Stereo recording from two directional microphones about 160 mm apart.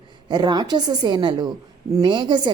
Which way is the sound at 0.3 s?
25° right (ahead or behind).